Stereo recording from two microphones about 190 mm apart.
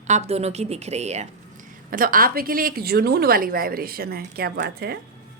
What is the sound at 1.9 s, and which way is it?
A woman's voice, 45° right (ahead or behind).